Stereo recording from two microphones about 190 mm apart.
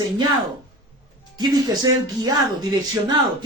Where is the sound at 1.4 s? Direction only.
20° right (ahead or behind).